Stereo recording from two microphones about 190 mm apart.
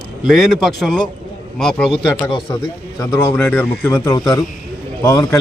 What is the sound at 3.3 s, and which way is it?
A man's voice, 5° left (ahead or behind).